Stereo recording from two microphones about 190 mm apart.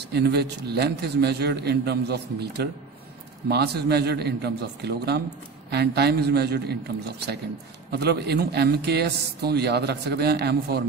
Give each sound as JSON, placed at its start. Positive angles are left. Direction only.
{"t": 0.1, "sound": "a man's voice", "side_deg": -60}